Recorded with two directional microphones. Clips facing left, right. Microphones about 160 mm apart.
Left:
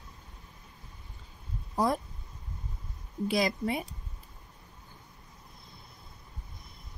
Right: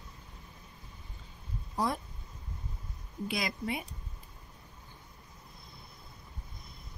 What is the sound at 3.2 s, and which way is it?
Speech, 40° left (ahead or behind).